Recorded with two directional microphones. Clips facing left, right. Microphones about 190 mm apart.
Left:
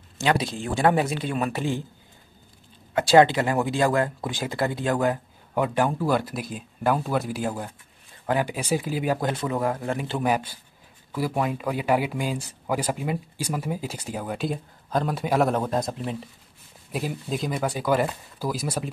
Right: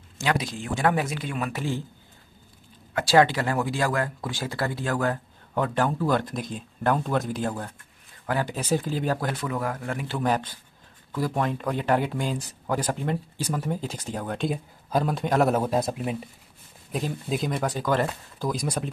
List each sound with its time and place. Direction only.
0.2 s speech: 30° left (ahead or behind)
2.9 s speech: 25° left (ahead or behind)
9.3 s speech: 25° left (ahead or behind)
10.2 s speech: 10° left (ahead or behind)
14.9 s a man's voice: 5° right (ahead or behind)
16.9 s speech: centre (ahead or behind)